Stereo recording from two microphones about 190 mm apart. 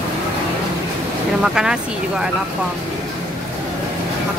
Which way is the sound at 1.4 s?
5° right (ahead or behind).